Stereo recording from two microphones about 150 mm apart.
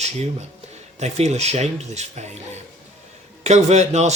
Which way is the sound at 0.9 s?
50° right (ahead or behind).